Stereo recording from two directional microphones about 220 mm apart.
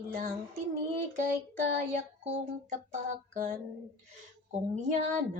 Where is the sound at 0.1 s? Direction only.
35° right (ahead or behind).